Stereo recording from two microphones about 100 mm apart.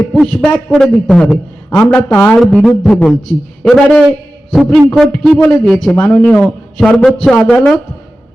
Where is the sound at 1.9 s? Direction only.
15° left (ahead or behind).